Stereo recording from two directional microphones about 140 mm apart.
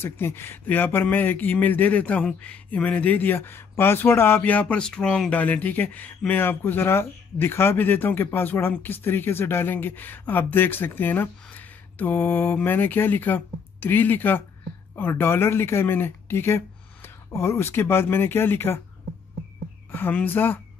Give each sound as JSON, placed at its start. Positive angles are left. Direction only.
{"t": 0.0, "sound": "speech", "side_deg": 15}
{"t": 19.9, "sound": "speech", "side_deg": 15}